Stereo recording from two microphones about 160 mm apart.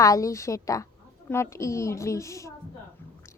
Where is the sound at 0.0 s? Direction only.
20° left (ahead or behind).